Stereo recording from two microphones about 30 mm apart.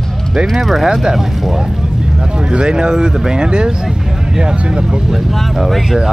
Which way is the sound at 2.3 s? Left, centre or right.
Right.